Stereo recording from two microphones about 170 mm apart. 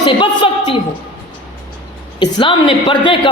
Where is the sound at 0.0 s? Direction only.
30° left (ahead or behind).